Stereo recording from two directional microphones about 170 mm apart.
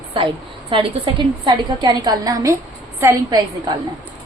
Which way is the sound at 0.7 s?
30° right (ahead or behind).